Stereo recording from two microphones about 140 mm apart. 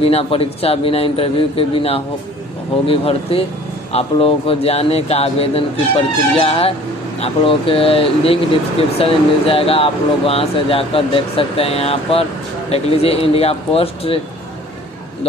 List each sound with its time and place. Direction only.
0.0 s speech: 45° left (ahead or behind)